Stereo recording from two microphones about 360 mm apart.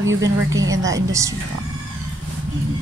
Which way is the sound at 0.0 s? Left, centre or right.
Right.